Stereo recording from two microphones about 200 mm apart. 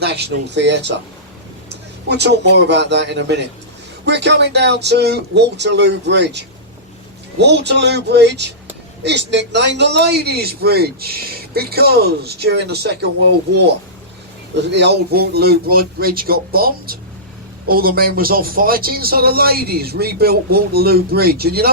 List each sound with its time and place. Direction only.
0.0 s speech: 55° right (ahead or behind)
2.0 s speech: 60° right (ahead or behind)
14.6 s speech: 60° right (ahead or behind)